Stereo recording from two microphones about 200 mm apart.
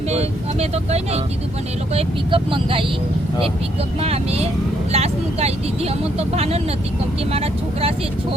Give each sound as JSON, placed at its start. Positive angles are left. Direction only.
{"t": 0.1, "sound": "speech", "side_deg": -30}
{"t": 4.0, "sound": "speech", "side_deg": -30}